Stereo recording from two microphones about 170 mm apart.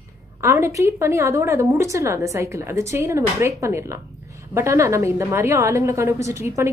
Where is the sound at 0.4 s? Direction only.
15° right (ahead or behind).